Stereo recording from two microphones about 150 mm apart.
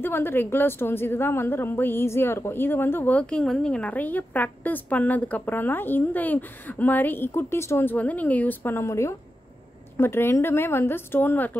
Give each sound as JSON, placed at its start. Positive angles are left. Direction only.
{"t": 0.0, "sound": "a woman's voice", "side_deg": 15}